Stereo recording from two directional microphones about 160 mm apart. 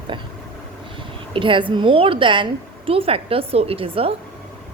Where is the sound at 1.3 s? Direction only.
30° right (ahead or behind).